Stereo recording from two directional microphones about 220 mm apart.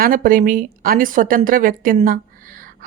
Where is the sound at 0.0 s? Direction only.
40° right (ahead or behind).